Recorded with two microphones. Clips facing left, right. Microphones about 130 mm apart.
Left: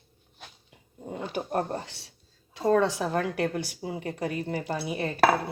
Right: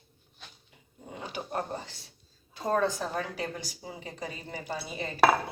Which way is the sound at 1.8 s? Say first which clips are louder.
Left 2 dB; 70° left (ahead or behind).